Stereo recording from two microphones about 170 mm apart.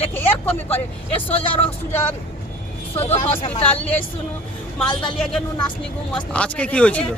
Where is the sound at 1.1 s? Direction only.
35° left (ahead or behind).